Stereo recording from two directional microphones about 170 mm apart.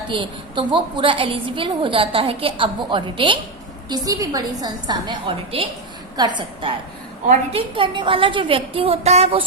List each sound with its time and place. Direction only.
0.1 s a woman's voice: 30° right (ahead or behind)
7.8 s a woman's voice: 30° right (ahead or behind)